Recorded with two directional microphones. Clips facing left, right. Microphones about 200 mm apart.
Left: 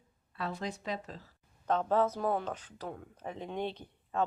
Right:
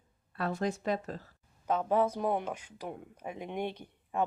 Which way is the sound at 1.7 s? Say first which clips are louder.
Even; 10° right (ahead or behind).